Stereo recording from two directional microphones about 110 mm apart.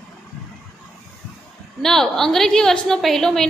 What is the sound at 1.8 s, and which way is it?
A woman's voice, 5° left (ahead or behind).